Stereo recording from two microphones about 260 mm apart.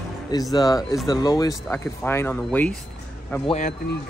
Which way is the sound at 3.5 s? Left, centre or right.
Left.